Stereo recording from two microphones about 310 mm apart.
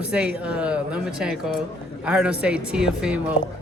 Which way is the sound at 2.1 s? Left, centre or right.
Centre.